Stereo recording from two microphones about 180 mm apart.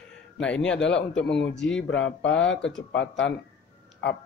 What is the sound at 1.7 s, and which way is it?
Speech, 90° left.